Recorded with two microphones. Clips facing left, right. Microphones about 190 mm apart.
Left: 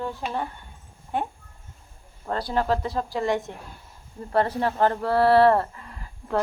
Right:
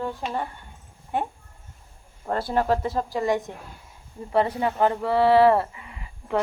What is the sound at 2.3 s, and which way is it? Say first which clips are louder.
A woman's voice: right 1 dB; 20° right (ahead or behind).